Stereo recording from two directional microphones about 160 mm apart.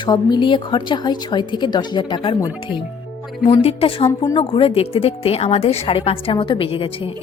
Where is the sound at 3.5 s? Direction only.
40° left (ahead or behind).